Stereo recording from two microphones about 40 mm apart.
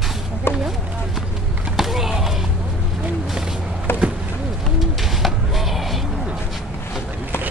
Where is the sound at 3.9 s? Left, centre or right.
Left.